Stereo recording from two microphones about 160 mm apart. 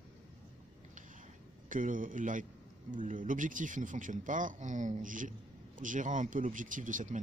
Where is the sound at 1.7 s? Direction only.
55° right (ahead or behind).